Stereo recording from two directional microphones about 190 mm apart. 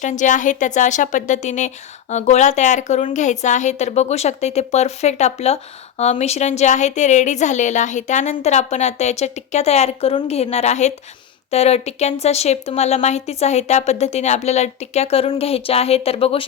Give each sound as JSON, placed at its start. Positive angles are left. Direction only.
{"t": 0.0, "sound": "speech", "side_deg": 40}